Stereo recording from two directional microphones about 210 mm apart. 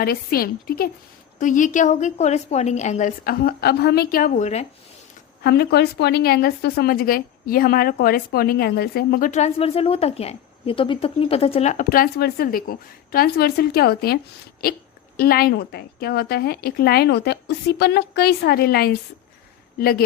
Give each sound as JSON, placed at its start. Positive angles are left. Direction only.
{"t": 0.0, "sound": "a woman's voice", "side_deg": 45}
{"t": 5.4, "sound": "speech", "side_deg": 50}